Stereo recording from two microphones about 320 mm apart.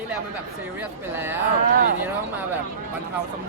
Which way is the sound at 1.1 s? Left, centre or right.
Centre.